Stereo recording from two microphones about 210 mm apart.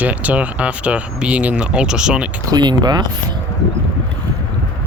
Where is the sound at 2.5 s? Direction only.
20° right (ahead or behind).